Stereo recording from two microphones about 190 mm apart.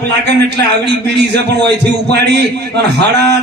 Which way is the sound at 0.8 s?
65° right (ahead or behind).